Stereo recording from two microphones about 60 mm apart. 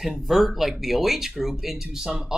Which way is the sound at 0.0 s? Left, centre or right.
Centre.